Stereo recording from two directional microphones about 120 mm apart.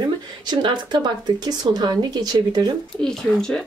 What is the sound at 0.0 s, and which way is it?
Speech, 35° right (ahead or behind).